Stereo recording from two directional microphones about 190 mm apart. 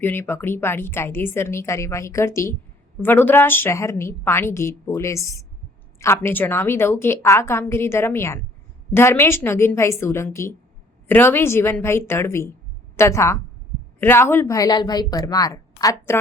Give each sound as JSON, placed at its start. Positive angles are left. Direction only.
{"t": 0.0, "sound": "a woman's voice", "side_deg": 10}